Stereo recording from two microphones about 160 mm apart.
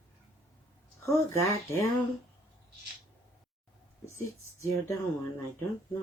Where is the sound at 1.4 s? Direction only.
20° left (ahead or behind).